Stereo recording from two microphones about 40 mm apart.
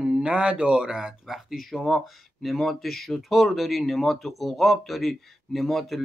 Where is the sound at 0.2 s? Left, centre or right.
Right.